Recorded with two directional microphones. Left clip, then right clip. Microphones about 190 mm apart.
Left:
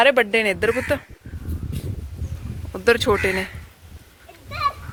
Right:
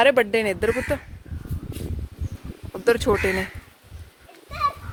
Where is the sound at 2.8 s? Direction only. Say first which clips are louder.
Left 2 dB; 10° right (ahead or behind).